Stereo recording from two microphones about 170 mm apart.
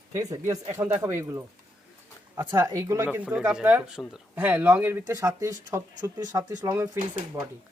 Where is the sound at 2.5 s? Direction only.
15° right (ahead or behind).